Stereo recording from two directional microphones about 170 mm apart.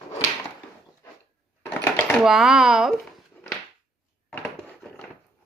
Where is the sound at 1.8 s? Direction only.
15° left (ahead or behind).